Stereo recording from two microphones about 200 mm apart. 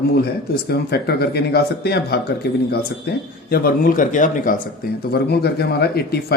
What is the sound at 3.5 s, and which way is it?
Speech, 45° left (ahead or behind).